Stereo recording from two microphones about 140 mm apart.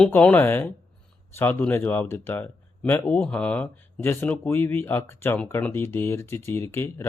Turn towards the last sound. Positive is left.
turn(degrees=15)  # may be behind; listen again after turning